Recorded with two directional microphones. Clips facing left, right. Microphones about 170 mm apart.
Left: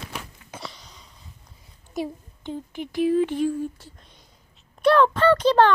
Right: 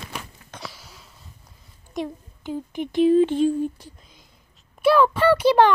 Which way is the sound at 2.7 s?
20° right (ahead or behind).